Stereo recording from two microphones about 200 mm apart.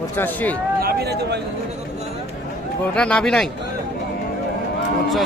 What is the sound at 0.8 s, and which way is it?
Speech, 50° right (ahead or behind).